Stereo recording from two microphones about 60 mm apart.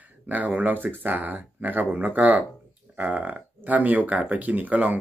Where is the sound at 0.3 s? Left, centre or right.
Right.